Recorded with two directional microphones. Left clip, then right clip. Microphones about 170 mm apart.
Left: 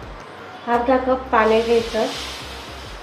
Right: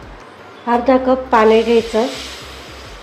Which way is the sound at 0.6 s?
60° right (ahead or behind).